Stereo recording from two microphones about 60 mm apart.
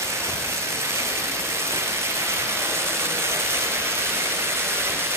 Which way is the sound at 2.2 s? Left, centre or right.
Right.